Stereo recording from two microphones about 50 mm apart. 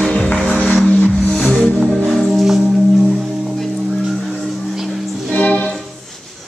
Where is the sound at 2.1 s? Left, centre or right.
Centre.